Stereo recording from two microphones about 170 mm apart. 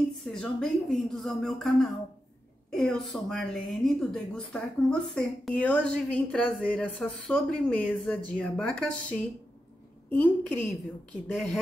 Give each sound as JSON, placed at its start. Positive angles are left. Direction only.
{"t": 0.2, "sound": "a woman's voice", "side_deg": 5}